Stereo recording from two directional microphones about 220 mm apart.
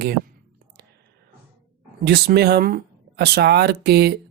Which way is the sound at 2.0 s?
50° right (ahead or behind).